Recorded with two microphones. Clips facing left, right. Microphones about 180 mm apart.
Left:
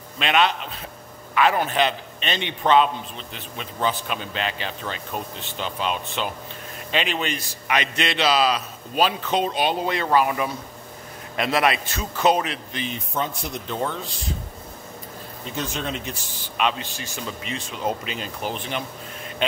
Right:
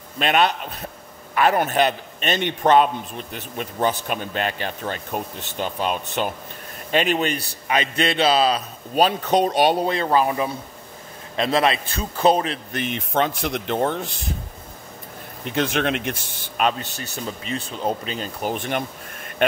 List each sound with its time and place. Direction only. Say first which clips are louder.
1.4 s a man's voice: right 2 dB; 45° right (ahead or behind)
7.7 s a man's voice: right 3 dB; 30° right (ahead or behind)
12.7 s speech: right 6 dB; 65° right (ahead or behind); by 13.7 s 85° right
13.7 s speech: right 4 dB; 60° right (ahead or behind)
15.4 s speech: right 7 dB; 75° right (ahead or behind)
16.5 s a man's voice: right 2 dB; 45° right (ahead or behind)